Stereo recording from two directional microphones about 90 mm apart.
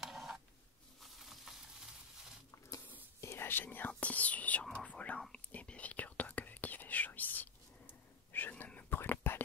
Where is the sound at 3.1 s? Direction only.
30° left (ahead or behind).